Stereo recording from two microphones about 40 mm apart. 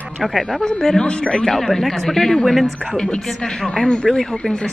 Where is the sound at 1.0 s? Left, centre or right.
Left.